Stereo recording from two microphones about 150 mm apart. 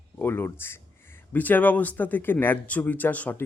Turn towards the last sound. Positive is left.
turn(degrees=10)  # may be behind; listen again after turning